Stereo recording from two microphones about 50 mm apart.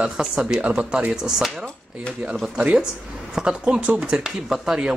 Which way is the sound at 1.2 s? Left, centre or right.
Centre.